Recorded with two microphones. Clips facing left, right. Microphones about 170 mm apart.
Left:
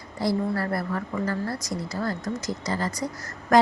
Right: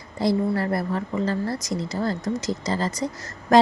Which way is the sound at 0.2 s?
25° right (ahead or behind).